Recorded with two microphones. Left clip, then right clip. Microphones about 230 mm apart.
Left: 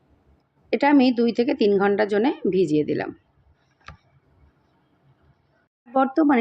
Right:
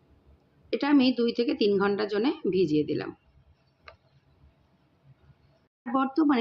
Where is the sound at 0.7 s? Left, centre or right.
Centre.